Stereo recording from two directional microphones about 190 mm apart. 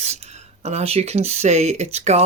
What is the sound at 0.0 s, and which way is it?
Speech, 35° right (ahead or behind).